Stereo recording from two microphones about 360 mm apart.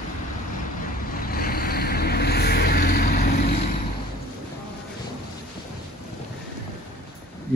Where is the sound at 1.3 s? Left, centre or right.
Left.